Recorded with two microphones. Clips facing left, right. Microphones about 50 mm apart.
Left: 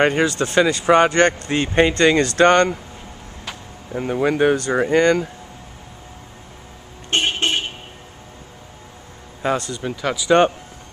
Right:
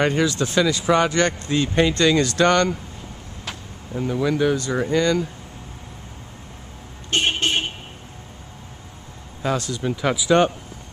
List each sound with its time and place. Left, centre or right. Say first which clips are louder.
0.0 s speech: left 3 dB; left
3.9 s speech: left 2 dB; left
7.1 s vehicle: left 1 dB; left
9.6 s speech: right 1 dB; centre
10.0 s speech: even; centre